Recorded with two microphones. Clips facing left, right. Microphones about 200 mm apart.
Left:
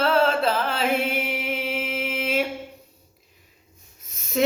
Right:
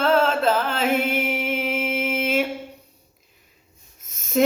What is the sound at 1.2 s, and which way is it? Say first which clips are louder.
Music: right 3 dB; 45° right (ahead or behind).